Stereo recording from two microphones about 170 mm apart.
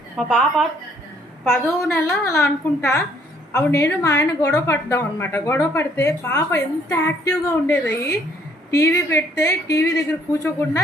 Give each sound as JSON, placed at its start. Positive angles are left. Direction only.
{"t": 0.2, "sound": "a woman's voice", "side_deg": 0}
{"t": 1.5, "sound": "a woman's voice", "side_deg": 15}